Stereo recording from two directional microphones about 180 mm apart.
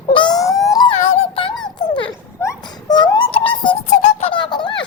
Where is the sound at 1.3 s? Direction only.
30° left (ahead or behind).